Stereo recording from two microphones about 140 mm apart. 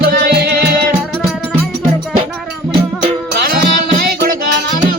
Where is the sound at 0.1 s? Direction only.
90° right.